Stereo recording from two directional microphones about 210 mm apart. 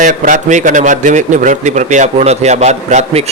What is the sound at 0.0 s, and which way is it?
A man's voice, 40° right (ahead or behind).